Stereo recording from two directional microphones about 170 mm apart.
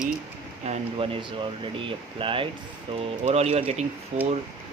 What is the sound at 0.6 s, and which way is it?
Speech, 35° right (ahead or behind).